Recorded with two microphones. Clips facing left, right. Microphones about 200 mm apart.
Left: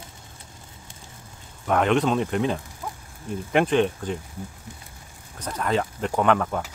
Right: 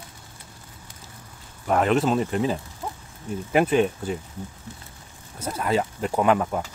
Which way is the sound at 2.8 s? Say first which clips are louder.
Right 2 dB; 25° right (ahead or behind).